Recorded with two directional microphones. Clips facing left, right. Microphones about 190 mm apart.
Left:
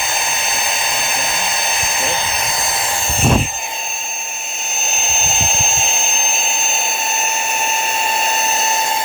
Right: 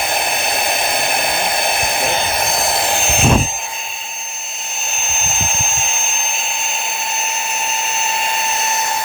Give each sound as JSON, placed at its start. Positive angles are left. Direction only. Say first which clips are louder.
{"t": 0.0, "sound": "dental drill", "louder": "right 4 dB", "side_deg": -60}